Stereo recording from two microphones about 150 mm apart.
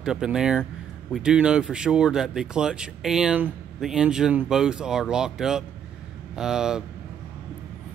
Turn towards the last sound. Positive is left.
turn(degrees=-5)  # may be behind; listen again after turning